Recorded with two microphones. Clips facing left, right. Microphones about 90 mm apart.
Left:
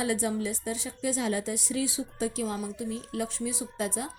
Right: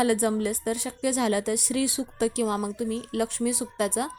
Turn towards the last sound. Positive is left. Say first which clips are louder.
# right 5 dB
turn(degrees=-65)  # may be behind; listen again after turning